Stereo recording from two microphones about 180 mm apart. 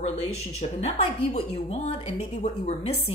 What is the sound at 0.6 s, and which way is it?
A woman's voice, 35° left (ahead or behind).